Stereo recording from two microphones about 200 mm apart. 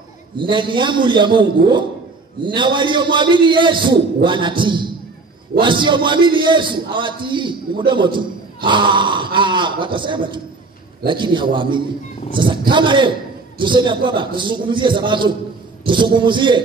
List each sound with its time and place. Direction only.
0.4 s a man's voice: 25° right (ahead or behind)